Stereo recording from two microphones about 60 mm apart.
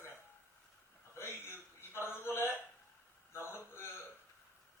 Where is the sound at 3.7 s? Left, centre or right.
Left.